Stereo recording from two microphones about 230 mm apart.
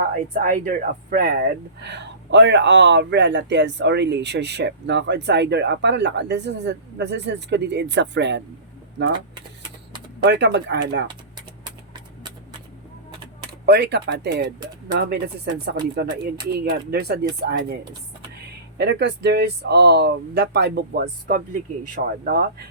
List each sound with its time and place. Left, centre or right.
0.1 s speech: right
9.3 s typewriter: centre
10.2 s speech: right
13.5 s speech: right
18.8 s speech: right